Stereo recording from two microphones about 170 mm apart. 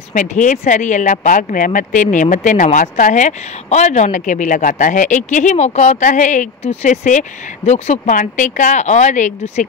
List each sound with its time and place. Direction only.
0.1 s speech: 50° left (ahead or behind)